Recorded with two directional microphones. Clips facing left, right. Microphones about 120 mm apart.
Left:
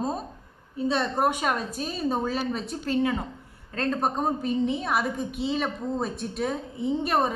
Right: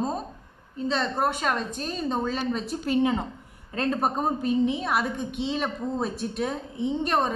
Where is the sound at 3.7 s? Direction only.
10° right (ahead or behind).